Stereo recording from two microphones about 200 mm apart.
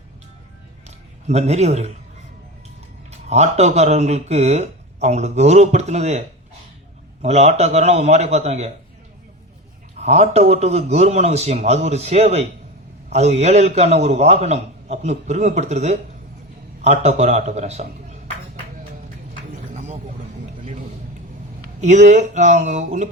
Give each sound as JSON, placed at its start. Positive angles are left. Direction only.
{"t": 0.9, "sound": "a sound", "side_deg": -35}
{"t": 3.1, "sound": "speech", "side_deg": -35}
{"t": 10.0, "sound": "speech", "side_deg": -35}
{"t": 21.8, "sound": "speech", "side_deg": -35}